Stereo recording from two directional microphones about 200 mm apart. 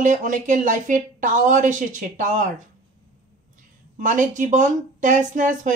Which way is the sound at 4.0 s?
40° right (ahead or behind).